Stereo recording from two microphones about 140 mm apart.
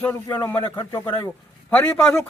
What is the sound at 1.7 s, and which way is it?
Speech, 10° left (ahead or behind).